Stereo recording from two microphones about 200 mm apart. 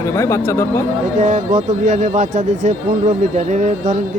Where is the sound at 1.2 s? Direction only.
40° right (ahead or behind).